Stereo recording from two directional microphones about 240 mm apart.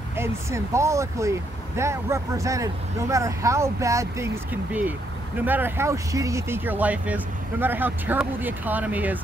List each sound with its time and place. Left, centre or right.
0.2 s speech: centre
5.4 s speech: centre